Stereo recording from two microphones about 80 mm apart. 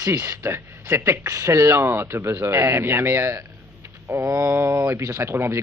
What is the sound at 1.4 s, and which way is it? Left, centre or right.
A man's voice, right.